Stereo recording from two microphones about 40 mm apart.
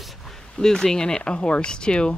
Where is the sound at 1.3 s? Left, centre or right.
Left.